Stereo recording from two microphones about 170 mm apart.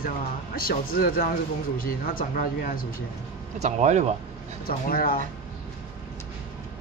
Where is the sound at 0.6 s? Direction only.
60° left (ahead or behind).